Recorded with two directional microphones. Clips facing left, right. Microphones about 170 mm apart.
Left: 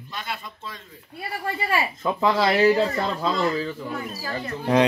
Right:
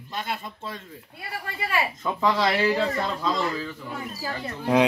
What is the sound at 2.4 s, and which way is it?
Speech, 30° left (ahead or behind).